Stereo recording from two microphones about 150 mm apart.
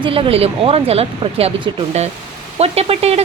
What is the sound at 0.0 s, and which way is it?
Speech, 35° right (ahead or behind).